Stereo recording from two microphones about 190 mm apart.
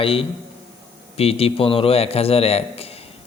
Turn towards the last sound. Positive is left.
turn(degrees=30)  # may be behind; listen again after turning